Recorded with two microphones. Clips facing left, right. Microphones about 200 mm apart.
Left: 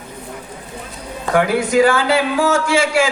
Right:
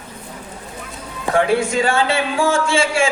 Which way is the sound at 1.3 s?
25° right (ahead or behind).